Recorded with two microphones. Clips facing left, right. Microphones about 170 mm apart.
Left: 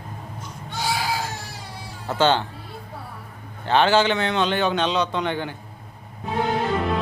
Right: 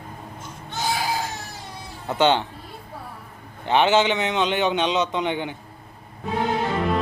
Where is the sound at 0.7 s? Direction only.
20° right (ahead or behind).